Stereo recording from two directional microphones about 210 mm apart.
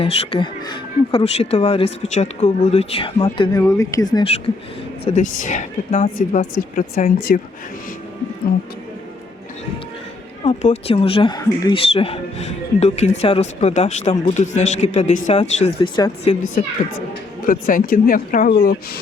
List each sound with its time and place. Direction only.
0.0 s speech: 25° left (ahead or behind)
5.0 s speech: 35° left (ahead or behind)
10.4 s speech: 30° left (ahead or behind)
15.6 s speech: 20° left (ahead or behind)
16.6 s speech: 35° left (ahead or behind)